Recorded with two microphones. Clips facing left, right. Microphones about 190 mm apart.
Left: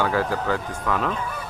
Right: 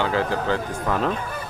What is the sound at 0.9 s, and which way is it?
Speech, 35° right (ahead or behind).